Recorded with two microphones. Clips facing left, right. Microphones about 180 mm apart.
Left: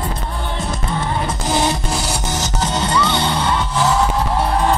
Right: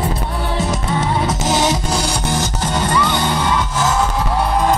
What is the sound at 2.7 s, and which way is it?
Music, 45° right (ahead or behind).